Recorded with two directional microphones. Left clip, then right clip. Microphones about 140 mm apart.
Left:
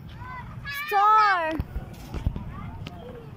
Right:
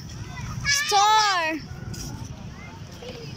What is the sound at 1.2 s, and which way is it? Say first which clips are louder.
Speech: left 1 dB; 10° left (ahead or behind).